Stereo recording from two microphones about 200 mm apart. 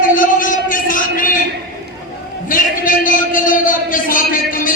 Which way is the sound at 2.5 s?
40° left (ahead or behind).